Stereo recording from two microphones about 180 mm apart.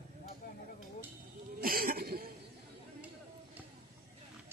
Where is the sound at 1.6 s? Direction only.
55° right (ahead or behind).